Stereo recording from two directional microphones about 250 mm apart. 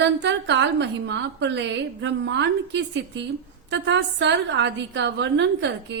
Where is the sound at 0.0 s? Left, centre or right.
Right.